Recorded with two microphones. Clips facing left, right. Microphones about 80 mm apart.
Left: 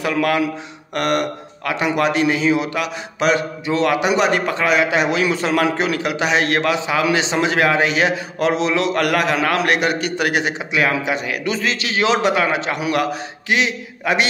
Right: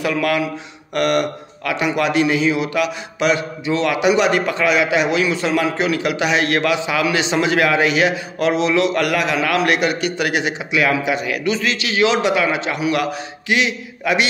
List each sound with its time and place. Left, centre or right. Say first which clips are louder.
0.0 s a man's voice: left 1 dB; left
6.0 s a man's voice: even; left